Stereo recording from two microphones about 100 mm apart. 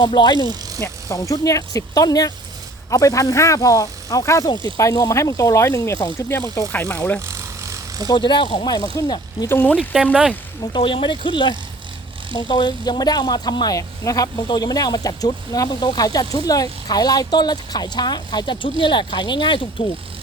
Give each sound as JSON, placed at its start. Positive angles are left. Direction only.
{"t": 0.0, "sound": "speech", "side_deg": 50}
{"t": 0.8, "sound": "speech", "side_deg": 35}
{"t": 7.3, "sound": "a sound", "side_deg": -30}
{"t": 8.0, "sound": "speech", "side_deg": 50}
{"t": 9.5, "sound": "speech", "side_deg": 20}
{"t": 9.7, "sound": "speech", "side_deg": -5}
{"t": 10.6, "sound": "speech", "side_deg": 50}